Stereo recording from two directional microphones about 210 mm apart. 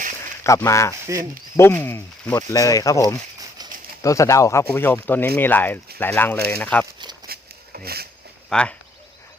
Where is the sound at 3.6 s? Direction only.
20° right (ahead or behind).